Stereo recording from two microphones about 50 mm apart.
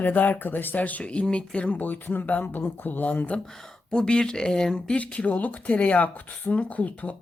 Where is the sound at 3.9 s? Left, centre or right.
Centre.